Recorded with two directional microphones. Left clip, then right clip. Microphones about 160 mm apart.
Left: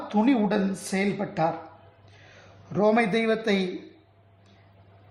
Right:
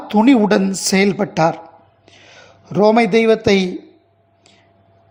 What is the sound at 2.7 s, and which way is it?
Speech, 35° right (ahead or behind).